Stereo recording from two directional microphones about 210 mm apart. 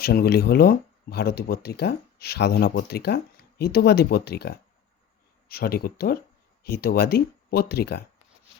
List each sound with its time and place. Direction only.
0.0 s speech: 50° left (ahead or behind)